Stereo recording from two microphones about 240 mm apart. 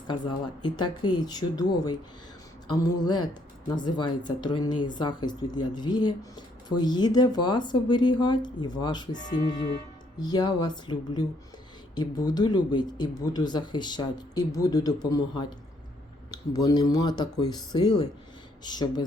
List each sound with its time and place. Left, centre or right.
0.1 s speech: centre